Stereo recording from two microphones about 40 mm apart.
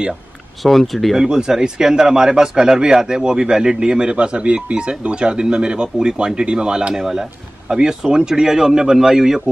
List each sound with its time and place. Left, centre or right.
0.6 s speech: centre
1.1 s speech: centre